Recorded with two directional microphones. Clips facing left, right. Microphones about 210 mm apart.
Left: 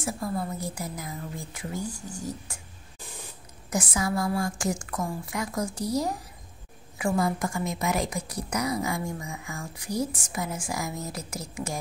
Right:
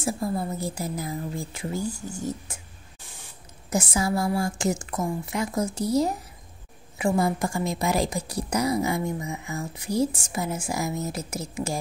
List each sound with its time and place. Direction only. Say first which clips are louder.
0.0 s a woman's voice: right 3 dB; 25° right (ahead or behind)
3.7 s a woman's voice: right 3 dB; 25° right (ahead or behind)